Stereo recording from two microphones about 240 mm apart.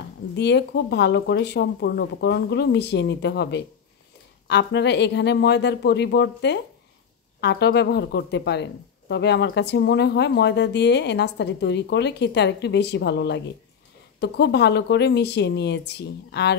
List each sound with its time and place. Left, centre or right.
0.4 s speech: left